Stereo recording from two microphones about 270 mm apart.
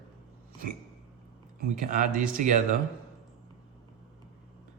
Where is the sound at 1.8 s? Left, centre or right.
Right.